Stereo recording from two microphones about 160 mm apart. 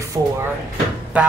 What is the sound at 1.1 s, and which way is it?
Speech, 10° right (ahead or behind).